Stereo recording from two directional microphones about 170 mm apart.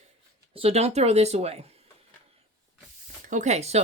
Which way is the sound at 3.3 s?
45° right (ahead or behind).